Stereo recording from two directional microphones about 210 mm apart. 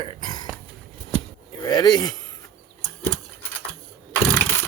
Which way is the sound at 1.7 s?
20° left (ahead or behind).